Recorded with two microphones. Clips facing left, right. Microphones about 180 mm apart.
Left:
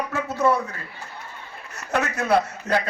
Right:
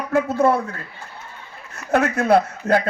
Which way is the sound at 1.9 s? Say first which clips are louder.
Right 5 dB; 55° right (ahead or behind).